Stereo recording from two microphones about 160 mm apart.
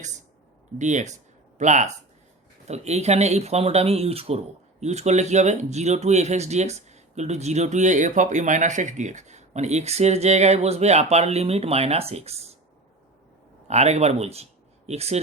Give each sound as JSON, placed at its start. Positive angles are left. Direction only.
{"t": 0.8, "sound": "speech", "side_deg": -50}
{"t": 13.7, "sound": "speech", "side_deg": -45}